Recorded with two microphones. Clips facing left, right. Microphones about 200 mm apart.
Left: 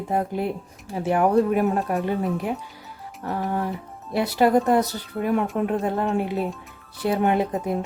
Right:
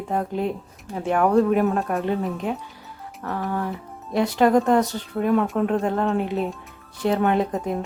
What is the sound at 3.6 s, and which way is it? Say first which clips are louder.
Speech: even; 5° left (ahead or behind).